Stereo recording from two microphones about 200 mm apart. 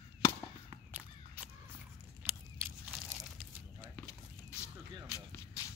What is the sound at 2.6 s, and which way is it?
Crunch, 10° right (ahead or behind).